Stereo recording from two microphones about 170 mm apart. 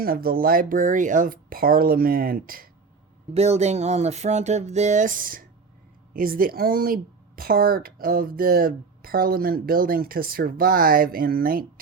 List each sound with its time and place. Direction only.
0.0 s speech: 60° right (ahead or behind)
3.3 s speech: 40° right (ahead or behind); by 11.6 s 60° right (ahead or behind)